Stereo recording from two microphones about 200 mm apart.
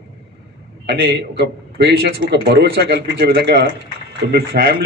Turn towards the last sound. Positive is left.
turn(degrees=-50)  # may be behind; listen again after turning